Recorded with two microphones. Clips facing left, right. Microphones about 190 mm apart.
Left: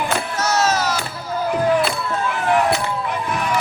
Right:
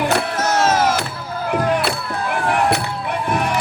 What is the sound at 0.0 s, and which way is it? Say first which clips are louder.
Music: right 3 dB; 65° right (ahead or behind).